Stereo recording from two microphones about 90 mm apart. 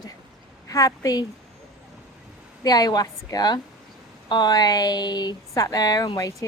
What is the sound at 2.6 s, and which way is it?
Speech, 45° left (ahead or behind).